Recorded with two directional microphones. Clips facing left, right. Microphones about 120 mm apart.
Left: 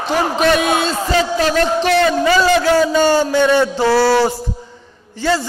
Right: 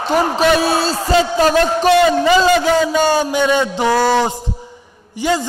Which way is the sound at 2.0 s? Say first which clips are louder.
Even; 15° right (ahead or behind).